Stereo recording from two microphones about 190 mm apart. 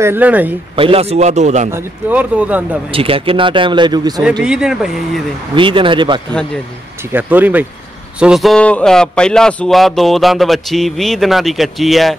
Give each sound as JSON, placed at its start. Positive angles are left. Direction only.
{"t": 0.0, "sound": "a man's voice", "side_deg": -10}
{"t": 0.7, "sound": "a man's voice", "side_deg": -30}
{"t": 1.7, "sound": "a man's voice", "side_deg": -10}
{"t": 2.9, "sound": "speech", "side_deg": -30}
{"t": 4.2, "sound": "speech", "side_deg": -5}
{"t": 5.6, "sound": "speech", "side_deg": -25}
{"t": 7.1, "sound": "a man's voice", "side_deg": -10}